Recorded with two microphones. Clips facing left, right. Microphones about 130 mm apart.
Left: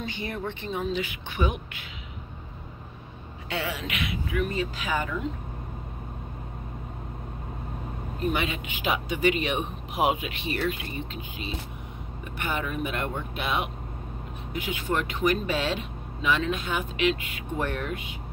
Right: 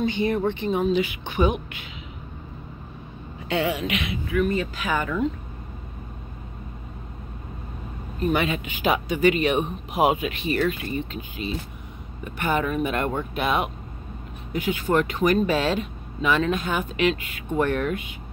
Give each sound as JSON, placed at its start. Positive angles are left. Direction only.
{"t": 0.0, "sound": "a woman's voice", "side_deg": -20}
{"t": 3.4, "sound": "a woman's voice", "side_deg": -20}
{"t": 4.4, "sound": "speech", "side_deg": -55}
{"t": 8.3, "sound": "speech", "side_deg": -45}
{"t": 12.4, "sound": "speech", "side_deg": -45}
{"t": 17.6, "sound": "speech", "side_deg": -60}